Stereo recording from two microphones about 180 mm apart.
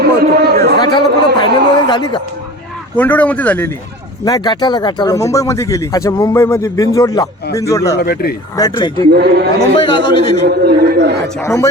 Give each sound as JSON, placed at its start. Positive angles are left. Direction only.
{"t": 0.0, "sound": "a sound", "side_deg": -60}
{"t": 0.9, "sound": "a sound", "side_deg": 25}
{"t": 2.9, "sound": "speech", "side_deg": 10}
{"t": 4.3, "sound": "speech", "side_deg": 25}
{"t": 7.9, "sound": "speech", "side_deg": 60}
{"t": 8.5, "sound": "speech", "side_deg": 20}
{"t": 9.1, "sound": "speech", "side_deg": -65}
{"t": 9.8, "sound": "speech", "side_deg": 25}
{"t": 10.4, "sound": "speech", "side_deg": -65}
{"t": 11.3, "sound": "speech", "side_deg": 15}